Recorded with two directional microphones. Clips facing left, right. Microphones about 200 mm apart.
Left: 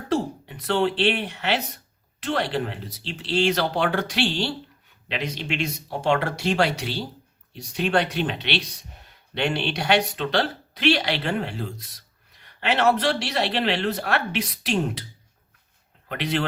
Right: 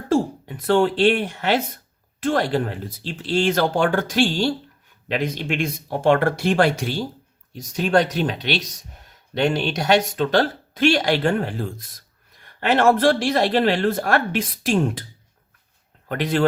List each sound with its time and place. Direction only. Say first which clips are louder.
0.1 s speech: right 5 dB; 45° right (ahead or behind)
16.0 s speech: right 6 dB; 45° right (ahead or behind)